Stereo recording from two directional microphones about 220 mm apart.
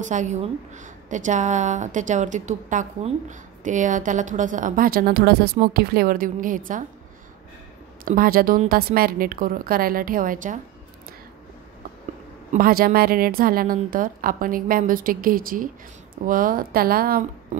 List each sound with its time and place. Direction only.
0.0 s a woman's voice: 35° right (ahead or behind)
8.0 s a woman's voice: 40° right (ahead or behind)
12.5 s a woman's voice: 40° right (ahead or behind)